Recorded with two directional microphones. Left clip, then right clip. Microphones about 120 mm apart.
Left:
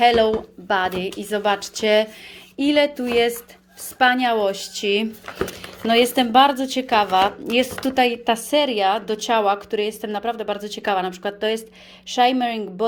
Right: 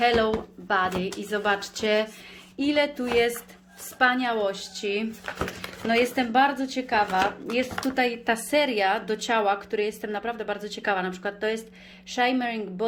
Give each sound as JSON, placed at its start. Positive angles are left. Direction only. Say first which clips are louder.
{"t": 0.0, "sound": "a woman's voice", "louder": "left 6 dB", "side_deg": 40}
{"t": 3.9, "sound": "speech", "louder": "left 5 dB", "side_deg": 55}
{"t": 5.9, "sound": "speech", "louder": "left 7 dB", "side_deg": 65}
{"t": 7.9, "sound": "a woman's voice", "louder": "left 7 dB", "side_deg": 50}